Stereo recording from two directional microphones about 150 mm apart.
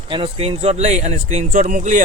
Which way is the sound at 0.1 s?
40° right (ahead or behind).